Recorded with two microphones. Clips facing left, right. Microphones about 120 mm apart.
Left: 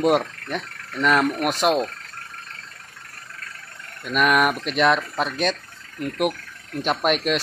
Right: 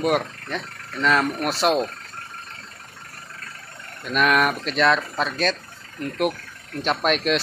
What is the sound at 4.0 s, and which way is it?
Speech, 5° left (ahead or behind).